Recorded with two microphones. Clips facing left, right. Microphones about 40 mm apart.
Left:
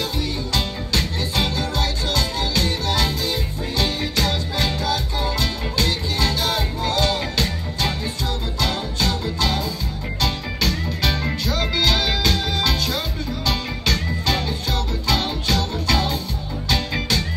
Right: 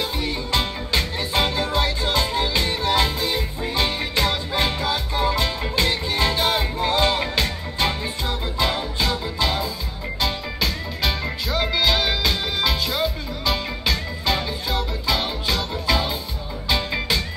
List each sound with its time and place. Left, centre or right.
0.2 s music: right; by 17.2 s centre